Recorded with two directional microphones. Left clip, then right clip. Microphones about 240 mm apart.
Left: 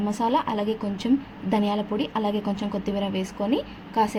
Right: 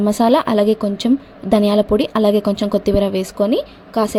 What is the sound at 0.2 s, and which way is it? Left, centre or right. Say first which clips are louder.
A woman's voice: right 9 dB; right.